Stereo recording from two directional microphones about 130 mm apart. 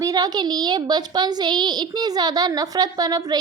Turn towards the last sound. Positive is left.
turn(degrees=-30)  # may be behind; listen again after turning